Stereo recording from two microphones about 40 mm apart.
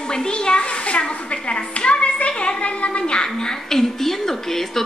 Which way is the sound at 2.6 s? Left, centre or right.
Left.